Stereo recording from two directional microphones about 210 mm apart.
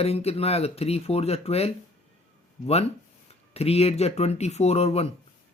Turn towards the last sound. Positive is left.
turn(degrees=30)  # may be behind; listen again after turning